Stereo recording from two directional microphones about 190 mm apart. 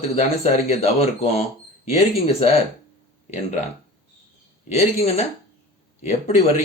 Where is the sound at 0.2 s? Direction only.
35° left (ahead or behind).